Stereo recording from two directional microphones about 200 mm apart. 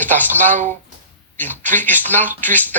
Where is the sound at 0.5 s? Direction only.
35° right (ahead or behind).